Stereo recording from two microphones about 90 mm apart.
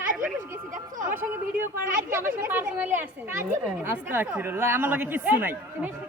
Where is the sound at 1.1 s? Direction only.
25° right (ahead or behind).